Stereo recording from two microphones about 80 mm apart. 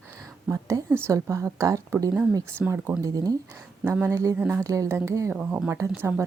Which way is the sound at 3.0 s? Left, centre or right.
Right.